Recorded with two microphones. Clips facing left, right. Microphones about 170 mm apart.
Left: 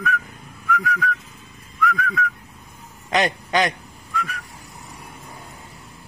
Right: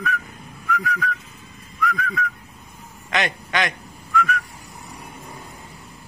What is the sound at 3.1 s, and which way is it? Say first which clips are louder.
Speech: left 4 dB; 35° left (ahead or behind).